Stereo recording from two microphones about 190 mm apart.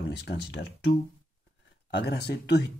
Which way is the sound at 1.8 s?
60° left (ahead or behind).